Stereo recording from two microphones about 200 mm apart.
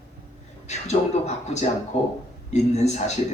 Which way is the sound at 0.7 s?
35° left (ahead or behind).